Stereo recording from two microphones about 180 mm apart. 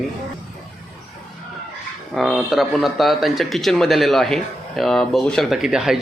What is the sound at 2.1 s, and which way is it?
Speech, centre (ahead or behind).